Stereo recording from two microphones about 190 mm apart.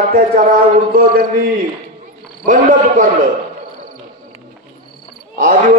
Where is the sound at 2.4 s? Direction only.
40° right (ahead or behind).